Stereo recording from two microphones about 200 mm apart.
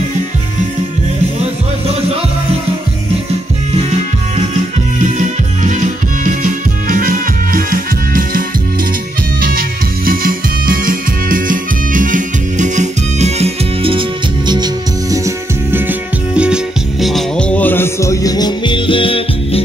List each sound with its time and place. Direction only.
5.0 s music: 40° right (ahead or behind)
14.5 s music: 20° right (ahead or behind); by 19.6 s 25° left (ahead or behind)